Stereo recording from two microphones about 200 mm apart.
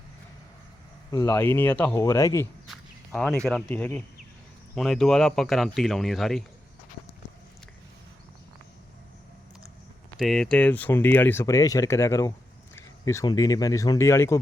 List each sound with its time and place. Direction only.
1.1 s speech: 15° left (ahead or behind)
2.6 s speech: centre (ahead or behind)
10.2 s speech: centre (ahead or behind)